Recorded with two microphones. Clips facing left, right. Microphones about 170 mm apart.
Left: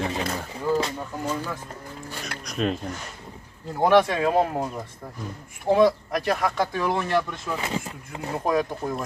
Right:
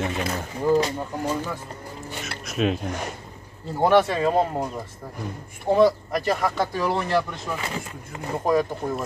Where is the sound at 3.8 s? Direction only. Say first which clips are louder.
Even; centre (ahead or behind).